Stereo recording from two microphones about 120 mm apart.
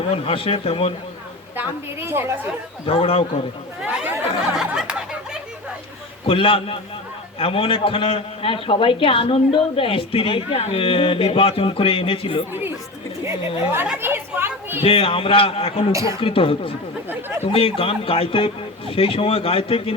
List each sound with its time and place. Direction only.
0.1 s a man's voice: 50° left (ahead or behind)
1.5 s a woman's voice: 20° right (ahead or behind)
2.8 s a man's voice: 50° left (ahead or behind)
3.8 s chatter: 10° right (ahead or behind)
4.5 s a sound: 5° right (ahead or behind)
6.2 s a man's voice: 50° left (ahead or behind)
14.0 s chatter: 20° right (ahead or behind)
14.8 s a man's voice: 50° left (ahead or behind)
15.9 s a woman's voice: 25° right (ahead or behind)
16.2 s a man's voice: 50° left (ahead or behind)
17.1 s speech: 15° right (ahead or behind)
17.4 s a man's voice: 50° left (ahead or behind)